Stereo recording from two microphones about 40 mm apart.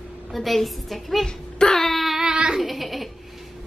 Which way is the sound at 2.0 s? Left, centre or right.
Centre.